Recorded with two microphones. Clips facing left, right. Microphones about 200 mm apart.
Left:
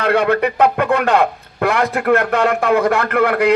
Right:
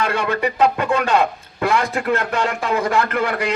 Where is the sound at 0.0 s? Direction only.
60° left (ahead or behind).